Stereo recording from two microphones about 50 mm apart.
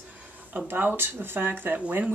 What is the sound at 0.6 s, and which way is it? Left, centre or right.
Speech, right.